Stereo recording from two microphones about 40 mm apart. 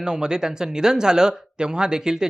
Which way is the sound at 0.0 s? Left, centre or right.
Centre.